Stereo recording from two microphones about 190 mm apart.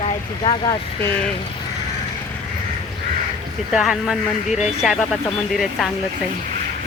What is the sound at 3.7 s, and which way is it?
Speech, centre (ahead or behind).